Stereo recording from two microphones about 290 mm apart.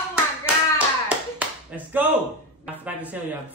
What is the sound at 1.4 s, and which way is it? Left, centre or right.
Clapping, centre.